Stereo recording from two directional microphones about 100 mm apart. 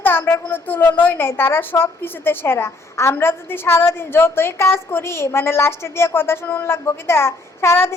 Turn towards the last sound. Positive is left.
turn(degrees=25)  # may be behind; listen again after turning